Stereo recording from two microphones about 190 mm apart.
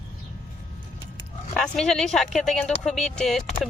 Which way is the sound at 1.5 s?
5° left (ahead or behind).